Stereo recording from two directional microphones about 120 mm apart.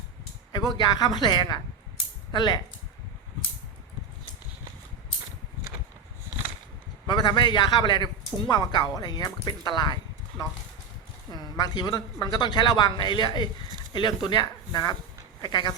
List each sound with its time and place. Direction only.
0.5 s speech: 35° left (ahead or behind)
7.1 s speech: 40° left (ahead or behind)